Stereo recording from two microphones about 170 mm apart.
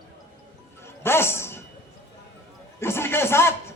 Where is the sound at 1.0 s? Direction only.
15° left (ahead or behind).